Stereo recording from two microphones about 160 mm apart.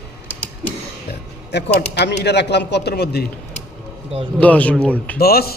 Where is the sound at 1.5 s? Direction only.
90° left.